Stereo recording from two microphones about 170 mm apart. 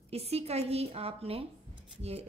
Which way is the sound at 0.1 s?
35° right (ahead or behind).